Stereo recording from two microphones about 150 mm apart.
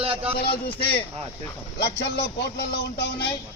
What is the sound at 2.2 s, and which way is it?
Speech, 90° left.